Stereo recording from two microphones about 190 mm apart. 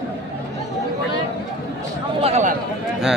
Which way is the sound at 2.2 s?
35° right (ahead or behind).